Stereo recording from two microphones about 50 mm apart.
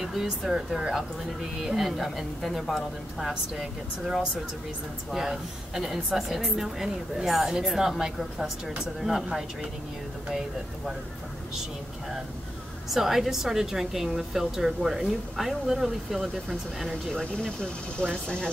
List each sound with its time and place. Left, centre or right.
0.0 s a woman's voice: centre
5.1 s a woman's voice: centre
12.9 s a woman's voice: centre
17.1 s speech: centre